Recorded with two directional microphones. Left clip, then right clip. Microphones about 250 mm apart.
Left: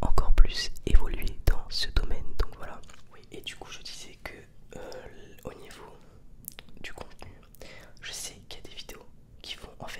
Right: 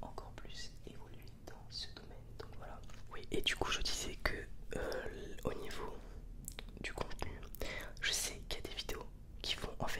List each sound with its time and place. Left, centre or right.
0.0 s whispering: left
3.1 s whispering: right; by 7.1 s centre
7.2 s whispering: centre